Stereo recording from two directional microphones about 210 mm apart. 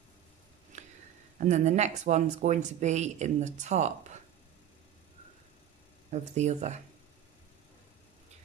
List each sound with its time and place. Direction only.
0.7 s a sound: 35° right (ahead or behind)
1.4 s speech: 35° right (ahead or behind)
6.3 s speech: 35° right (ahead or behind)